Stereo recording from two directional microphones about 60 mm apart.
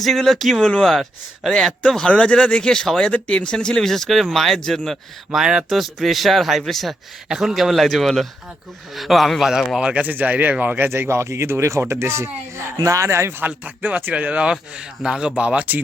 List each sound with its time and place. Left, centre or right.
0.0 s speech: centre
3.1 s speech: centre
5.3 s speech: centre
9.9 s speech: right
10.8 s speech: right
12.7 s speech: right
13.7 s speech: right